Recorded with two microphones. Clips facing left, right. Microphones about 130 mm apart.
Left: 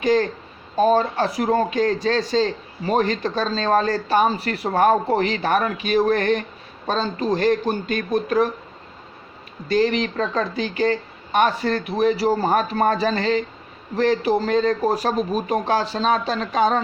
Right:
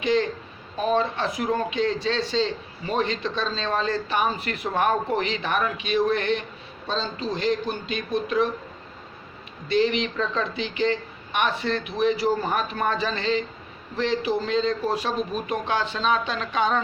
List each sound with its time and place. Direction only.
0.0 s a man's voice: 40° left (ahead or behind)
9.6 s a man's voice: 40° left (ahead or behind)